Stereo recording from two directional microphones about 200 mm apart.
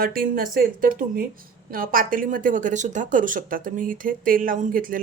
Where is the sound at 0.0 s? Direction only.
45° right (ahead or behind).